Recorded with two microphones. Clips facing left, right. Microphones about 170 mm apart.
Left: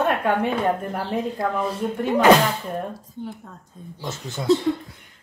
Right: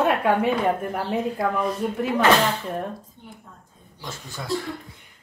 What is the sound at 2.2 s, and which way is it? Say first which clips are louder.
Speech: left 4 dB; 15° left (ahead or behind).